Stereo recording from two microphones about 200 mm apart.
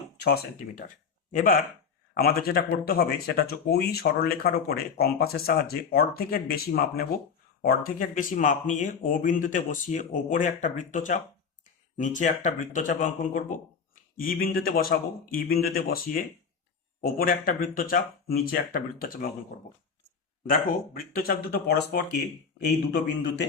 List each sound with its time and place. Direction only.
0.2 s speech: 50° left (ahead or behind)
20.5 s speech: 45° left (ahead or behind)